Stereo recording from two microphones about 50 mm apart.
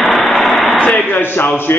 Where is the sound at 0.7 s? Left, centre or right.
Left.